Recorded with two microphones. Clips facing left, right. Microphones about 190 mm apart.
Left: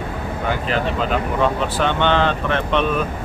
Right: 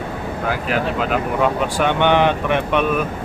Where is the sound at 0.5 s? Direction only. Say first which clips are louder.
Even; 5° right (ahead or behind).